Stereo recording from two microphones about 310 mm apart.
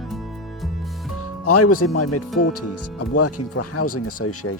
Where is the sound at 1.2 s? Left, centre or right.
Left.